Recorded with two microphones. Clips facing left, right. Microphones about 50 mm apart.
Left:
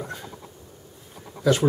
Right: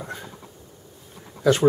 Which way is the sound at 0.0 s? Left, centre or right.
Centre.